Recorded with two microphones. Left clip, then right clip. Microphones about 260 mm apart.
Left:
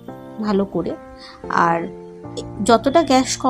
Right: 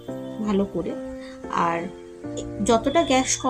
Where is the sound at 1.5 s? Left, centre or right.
Centre.